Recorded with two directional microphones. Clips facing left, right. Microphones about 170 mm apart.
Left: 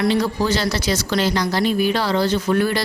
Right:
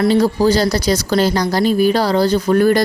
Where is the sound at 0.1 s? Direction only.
40° right (ahead or behind).